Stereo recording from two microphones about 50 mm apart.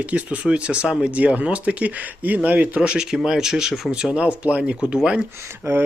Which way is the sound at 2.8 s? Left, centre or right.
Right.